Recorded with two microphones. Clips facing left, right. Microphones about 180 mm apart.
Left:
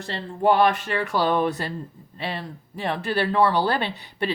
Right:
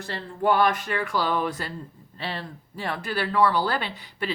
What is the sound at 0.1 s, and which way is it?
Speech, 25° left (ahead or behind).